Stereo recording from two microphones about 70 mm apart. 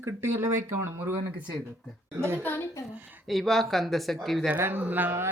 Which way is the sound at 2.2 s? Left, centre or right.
Right.